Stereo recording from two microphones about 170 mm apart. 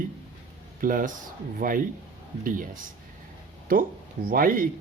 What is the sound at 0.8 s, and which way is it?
Speech, 55° right (ahead or behind).